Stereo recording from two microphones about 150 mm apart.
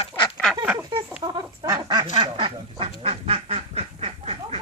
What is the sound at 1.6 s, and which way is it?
Duck, 25° right (ahead or behind).